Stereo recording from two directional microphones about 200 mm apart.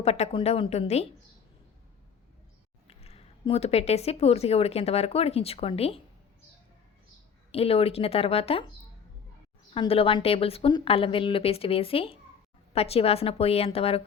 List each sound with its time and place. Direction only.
0.0 s a woman's voice: 30° left (ahead or behind)
2.8 s speech: 30° left (ahead or behind)
7.5 s a woman's voice: 30° left (ahead or behind)
9.7 s a woman's voice: 25° left (ahead or behind)